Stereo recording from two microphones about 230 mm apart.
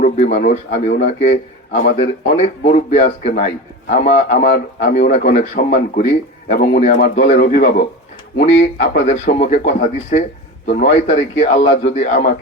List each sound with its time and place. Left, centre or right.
0.0 s speech: left
1.0 s a man's voice: left